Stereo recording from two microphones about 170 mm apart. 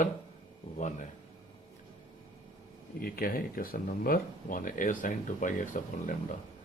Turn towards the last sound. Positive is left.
turn(degrees=50)  # may be behind; listen again after turning